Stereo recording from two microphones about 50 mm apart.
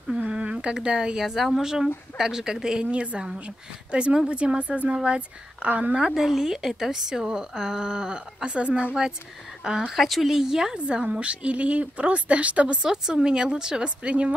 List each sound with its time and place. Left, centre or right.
0.3 s a woman's voice: right
5.7 s a woman's voice: right
6.1 s a woman's voice: centre
10.8 s a woman's voice: right
12.8 s a woman's voice: centre
13.8 s a woman's voice: right